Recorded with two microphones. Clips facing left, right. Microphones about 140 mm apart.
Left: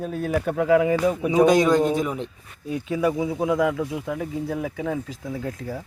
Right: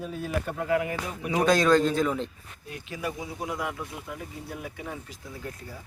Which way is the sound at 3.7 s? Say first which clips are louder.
Left 10 dB; 90° left.